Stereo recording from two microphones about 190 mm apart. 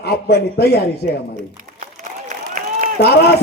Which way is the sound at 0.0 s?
55° left (ahead or behind).